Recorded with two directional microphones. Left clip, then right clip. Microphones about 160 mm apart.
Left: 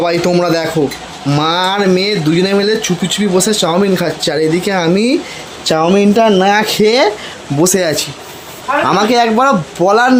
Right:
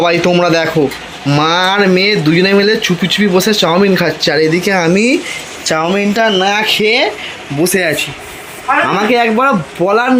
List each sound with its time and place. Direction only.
0.0 s speech: 5° left (ahead or behind)
5.6 s speech: 35° left (ahead or behind)
5.9 s speech: 55° left (ahead or behind)
7.8 s speech: 15° left (ahead or behind)